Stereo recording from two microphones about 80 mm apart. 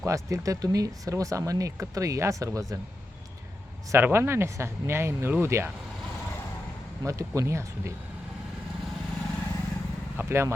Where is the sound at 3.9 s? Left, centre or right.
Right.